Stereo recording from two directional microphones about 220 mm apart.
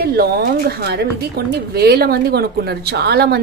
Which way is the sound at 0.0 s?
45° right (ahead or behind).